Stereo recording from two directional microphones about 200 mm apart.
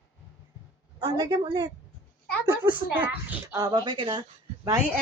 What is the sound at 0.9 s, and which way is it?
Speech, 25° right (ahead or behind).